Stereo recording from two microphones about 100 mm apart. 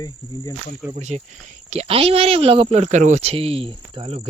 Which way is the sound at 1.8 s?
75° right (ahead or behind).